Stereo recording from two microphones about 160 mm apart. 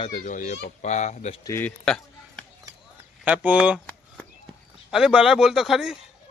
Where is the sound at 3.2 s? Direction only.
10° right (ahead or behind).